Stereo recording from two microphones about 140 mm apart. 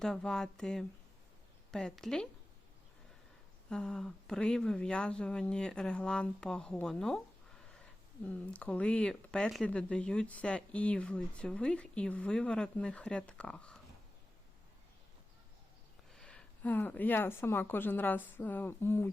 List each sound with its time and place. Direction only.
0.0 s speech: 5° left (ahead or behind)
3.7 s speech: 5° left (ahead or behind)
8.2 s speech: 10° left (ahead or behind)
16.1 s speech: 5° left (ahead or behind)